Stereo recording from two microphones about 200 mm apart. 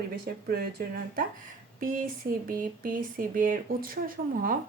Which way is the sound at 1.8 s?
45° right (ahead or behind).